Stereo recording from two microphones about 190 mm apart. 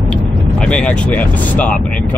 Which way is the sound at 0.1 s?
5° left (ahead or behind).